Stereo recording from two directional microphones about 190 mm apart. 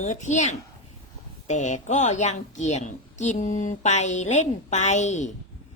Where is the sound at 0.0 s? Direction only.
40° left (ahead or behind).